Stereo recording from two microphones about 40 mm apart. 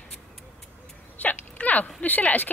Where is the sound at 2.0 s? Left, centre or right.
Left.